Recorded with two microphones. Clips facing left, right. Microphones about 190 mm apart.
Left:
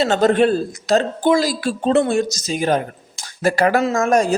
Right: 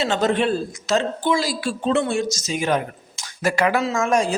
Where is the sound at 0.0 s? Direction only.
40° left (ahead or behind).